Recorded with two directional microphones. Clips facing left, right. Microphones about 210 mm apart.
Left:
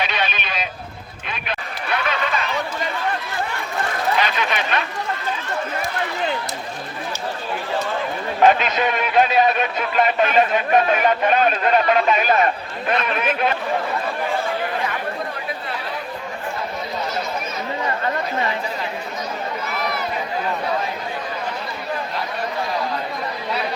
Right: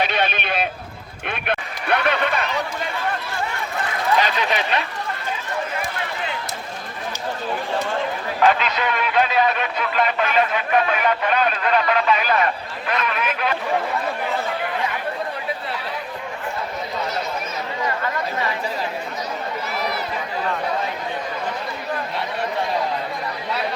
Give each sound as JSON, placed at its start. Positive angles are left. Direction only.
{"t": 0.0, "sound": "a sound", "side_deg": -55}
{"t": 1.3, "sound": "run", "side_deg": -60}
{"t": 4.2, "sound": "chatter", "side_deg": -35}
{"t": 8.4, "sound": "speech", "side_deg": 20}